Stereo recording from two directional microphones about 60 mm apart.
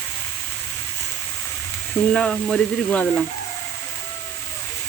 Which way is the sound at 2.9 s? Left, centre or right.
Centre.